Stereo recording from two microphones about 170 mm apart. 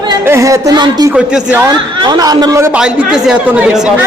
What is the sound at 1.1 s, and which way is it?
Speech, 5° right (ahead or behind).